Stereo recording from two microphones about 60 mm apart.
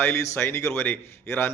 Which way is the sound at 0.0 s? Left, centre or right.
Left.